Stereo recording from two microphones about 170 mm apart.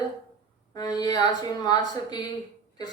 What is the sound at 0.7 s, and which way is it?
Speech, 25° left (ahead or behind).